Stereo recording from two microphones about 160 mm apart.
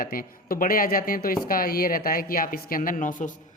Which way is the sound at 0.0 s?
60° left (ahead or behind).